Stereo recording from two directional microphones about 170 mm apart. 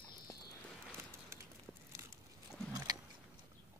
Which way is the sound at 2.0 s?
15° right (ahead or behind).